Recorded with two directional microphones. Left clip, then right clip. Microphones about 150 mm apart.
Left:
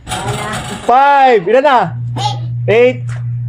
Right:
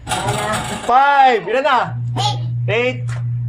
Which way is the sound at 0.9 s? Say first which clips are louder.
Left 4 dB; 35° left (ahead or behind).